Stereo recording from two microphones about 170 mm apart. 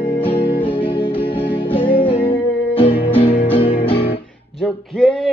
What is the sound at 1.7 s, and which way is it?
Music, 30° left (ahead or behind).